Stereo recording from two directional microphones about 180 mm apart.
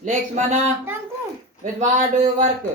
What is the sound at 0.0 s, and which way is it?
Speech, 40° right (ahead or behind).